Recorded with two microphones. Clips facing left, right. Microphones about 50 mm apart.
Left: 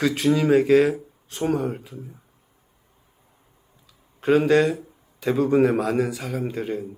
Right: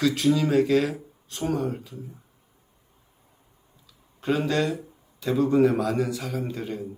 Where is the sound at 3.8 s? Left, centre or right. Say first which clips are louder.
Left 6 dB; left.